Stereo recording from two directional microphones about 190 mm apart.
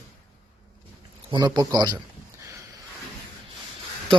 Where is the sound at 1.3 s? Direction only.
20° right (ahead or behind).